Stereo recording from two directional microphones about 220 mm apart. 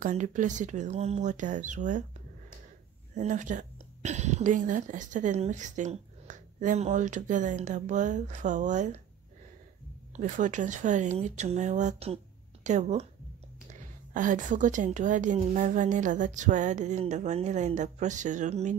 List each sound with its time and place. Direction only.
0.0 s a woman's voice: 35° right (ahead or behind)
3.2 s a woman's voice: 35° right (ahead or behind)
10.1 s a woman's voice: 35° right (ahead or behind)